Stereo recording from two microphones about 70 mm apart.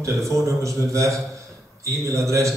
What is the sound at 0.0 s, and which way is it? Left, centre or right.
Mantra, right.